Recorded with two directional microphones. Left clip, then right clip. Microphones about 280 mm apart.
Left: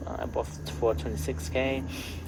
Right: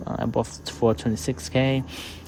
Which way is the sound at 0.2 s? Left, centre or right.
Right.